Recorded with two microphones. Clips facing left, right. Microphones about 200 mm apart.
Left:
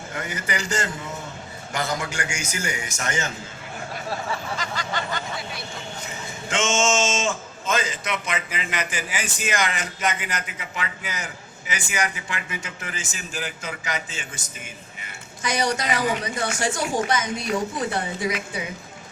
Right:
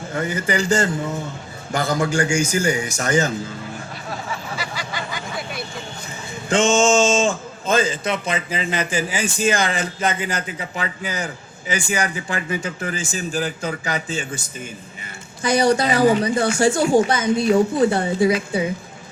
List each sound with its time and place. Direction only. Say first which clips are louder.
0.1 s a man's voice: right 8 dB; 30° right (ahead or behind)
4.5 s a sound: even; 10° right (ahead or behind)
6.5 s a man's voice: right 7 dB; 35° right (ahead or behind)